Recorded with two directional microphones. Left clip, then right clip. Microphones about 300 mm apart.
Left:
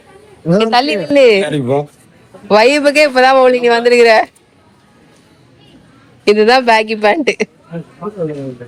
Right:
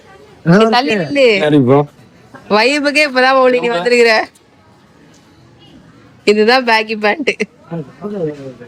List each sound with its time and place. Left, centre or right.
0.6 s speech: centre
1.4 s speech: right
2.5 s speech: centre
6.2 s speech: centre